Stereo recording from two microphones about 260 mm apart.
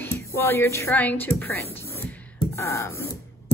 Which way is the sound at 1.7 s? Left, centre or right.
Centre.